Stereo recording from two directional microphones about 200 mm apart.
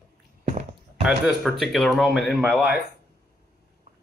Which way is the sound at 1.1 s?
Centre (ahead or behind).